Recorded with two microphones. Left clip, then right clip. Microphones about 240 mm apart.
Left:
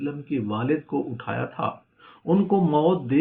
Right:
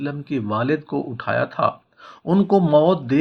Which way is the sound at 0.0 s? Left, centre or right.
Right.